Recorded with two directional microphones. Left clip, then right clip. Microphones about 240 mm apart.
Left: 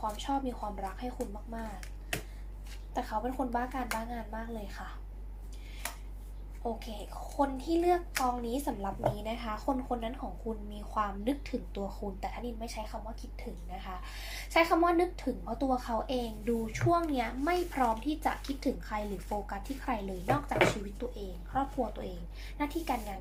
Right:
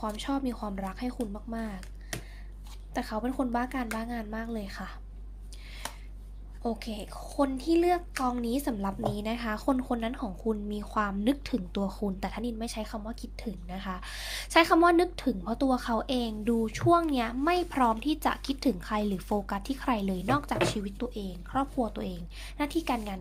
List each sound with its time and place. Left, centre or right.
0.0 s a woman's voice: right
2.9 s a woman's voice: right
6.6 s a woman's voice: right